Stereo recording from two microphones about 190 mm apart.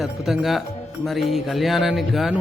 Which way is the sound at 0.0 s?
Centre (ahead or behind).